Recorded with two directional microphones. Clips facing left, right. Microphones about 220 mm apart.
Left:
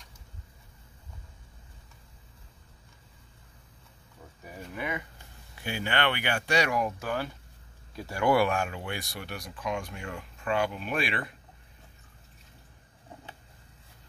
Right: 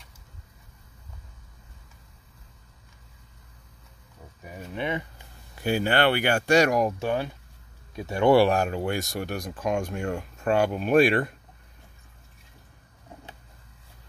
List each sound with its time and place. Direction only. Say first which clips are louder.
4.5 s speech: right 5 dB; 30° right (ahead or behind)
5.6 s speech: right 7 dB; 40° right (ahead or behind)
7.0 s speech: right 5 dB; 25° right (ahead or behind); by 11.3 s 45° right (ahead or behind)